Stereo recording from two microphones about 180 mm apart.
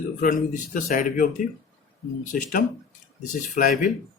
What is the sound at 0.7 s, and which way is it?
Speech, 45° left (ahead or behind).